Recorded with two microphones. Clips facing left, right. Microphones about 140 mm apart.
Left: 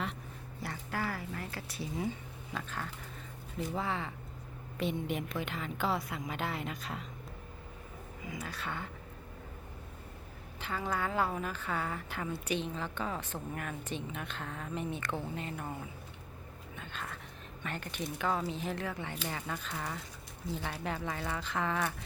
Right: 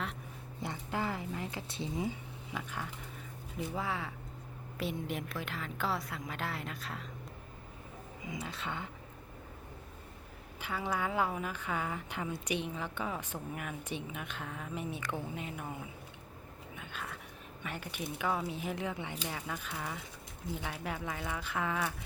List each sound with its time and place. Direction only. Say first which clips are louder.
0.6 s a sound: right 1 dB; 20° right (ahead or behind)
3.7 s a woman's voice: left 2 dB; 5° right (ahead or behind)
8.2 s speech: even; 20° right (ahead or behind)
10.6 s a woman's voice: even; 10° right (ahead or behind)
19.3 s a woman's voice: left 1 dB; 5° right (ahead or behind)